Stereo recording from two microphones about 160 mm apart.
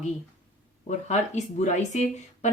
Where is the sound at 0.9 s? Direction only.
45° left (ahead or behind).